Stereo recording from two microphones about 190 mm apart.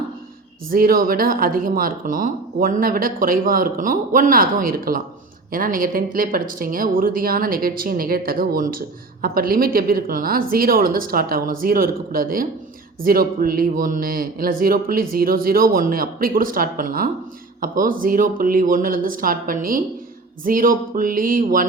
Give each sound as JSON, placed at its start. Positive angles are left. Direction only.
{"t": 0.7, "sound": "speech", "side_deg": -50}